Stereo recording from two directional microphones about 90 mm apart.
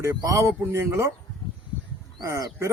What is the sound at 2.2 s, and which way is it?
Speech, 30° right (ahead or behind).